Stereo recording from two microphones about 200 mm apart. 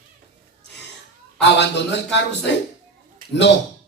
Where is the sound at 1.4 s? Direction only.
60° left (ahead or behind).